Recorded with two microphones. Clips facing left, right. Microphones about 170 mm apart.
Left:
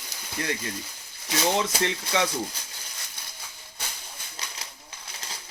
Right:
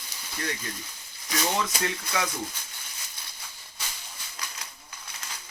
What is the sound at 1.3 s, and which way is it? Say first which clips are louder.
Speech: left 3 dB; 25° left (ahead or behind).